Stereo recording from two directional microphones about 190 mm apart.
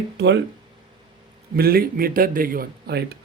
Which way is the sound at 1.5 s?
50° right (ahead or behind).